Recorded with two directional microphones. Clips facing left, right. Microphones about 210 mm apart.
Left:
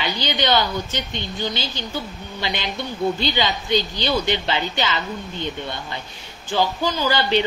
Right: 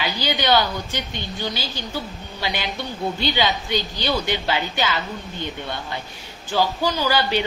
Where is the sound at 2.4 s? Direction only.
10° right (ahead or behind).